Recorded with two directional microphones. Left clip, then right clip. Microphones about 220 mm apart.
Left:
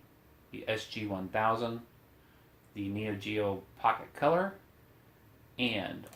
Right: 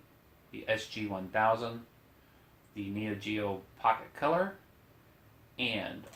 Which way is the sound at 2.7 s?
45° left (ahead or behind).